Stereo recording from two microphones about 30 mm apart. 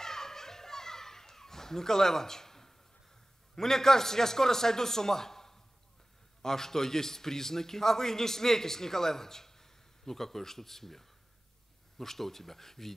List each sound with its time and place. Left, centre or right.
0.0 s children playing: centre
3.5 s a man's voice: centre